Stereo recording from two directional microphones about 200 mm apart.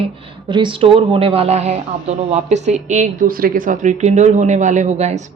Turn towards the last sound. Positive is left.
turn(degrees=-35)  # may be behind; listen again after turning